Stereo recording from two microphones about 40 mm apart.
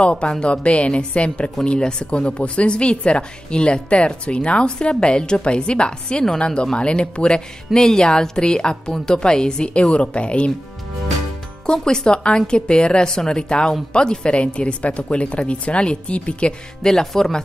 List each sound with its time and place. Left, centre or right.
0.0 s a woman's voice: left
11.6 s a woman's voice: centre
16.8 s speech: centre